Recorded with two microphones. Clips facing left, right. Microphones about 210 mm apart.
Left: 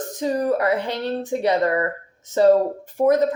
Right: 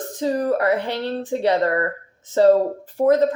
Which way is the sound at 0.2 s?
15° left (ahead or behind).